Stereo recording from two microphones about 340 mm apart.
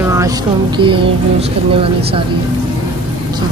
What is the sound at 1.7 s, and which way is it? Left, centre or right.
Speech, centre.